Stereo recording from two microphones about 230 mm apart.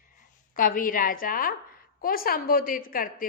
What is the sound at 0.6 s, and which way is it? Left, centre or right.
A woman's voice, left.